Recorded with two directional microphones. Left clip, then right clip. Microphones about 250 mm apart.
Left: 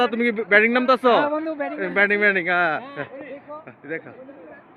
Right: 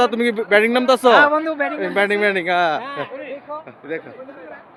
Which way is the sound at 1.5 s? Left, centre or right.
Right.